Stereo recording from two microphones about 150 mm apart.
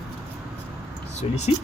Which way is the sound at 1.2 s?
45° left (ahead or behind).